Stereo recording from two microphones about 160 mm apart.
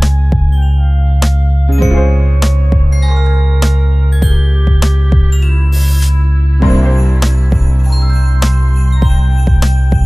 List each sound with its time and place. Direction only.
1.2 s music: centre (ahead or behind)
6.6 s music: centre (ahead or behind)